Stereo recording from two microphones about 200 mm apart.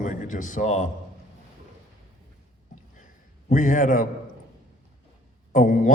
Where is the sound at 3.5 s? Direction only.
40° left (ahead or behind).